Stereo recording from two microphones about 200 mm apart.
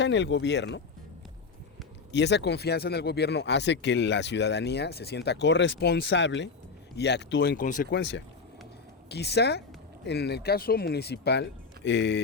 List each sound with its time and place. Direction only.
0.0 s speech: 60° left (ahead or behind)
2.1 s speech: 60° left (ahead or behind)
7.5 s speech: 40° left (ahead or behind)
7.9 s speech: 60° left (ahead or behind)